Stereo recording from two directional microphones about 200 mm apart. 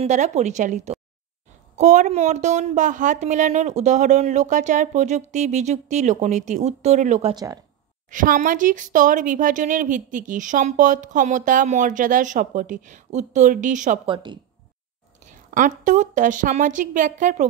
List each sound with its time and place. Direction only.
0.0 s speech: 35° right (ahead or behind)
7.3 s speech: 15° right (ahead or behind)
8.1 s speech: 40° right (ahead or behind)
14.0 s a woman's voice: 25° right (ahead or behind)
15.5 s speech: 40° right (ahead or behind)